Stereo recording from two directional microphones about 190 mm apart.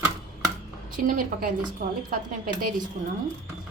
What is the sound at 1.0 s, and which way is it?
A woman's voice, 45° right (ahead or behind).